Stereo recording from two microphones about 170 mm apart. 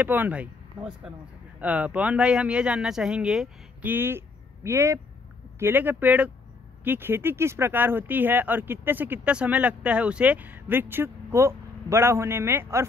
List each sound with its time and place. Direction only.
0.0 s speech: 10° right (ahead or behind)